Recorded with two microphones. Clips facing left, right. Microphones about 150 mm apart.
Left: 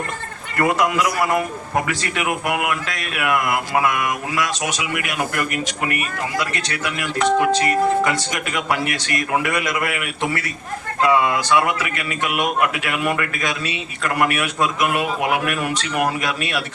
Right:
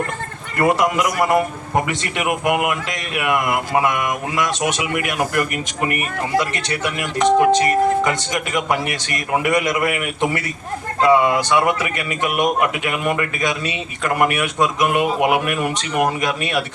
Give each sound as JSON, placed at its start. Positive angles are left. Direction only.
{"t": 0.6, "sound": "speech", "side_deg": -20}
{"t": 6.4, "sound": "a man's voice", "side_deg": -20}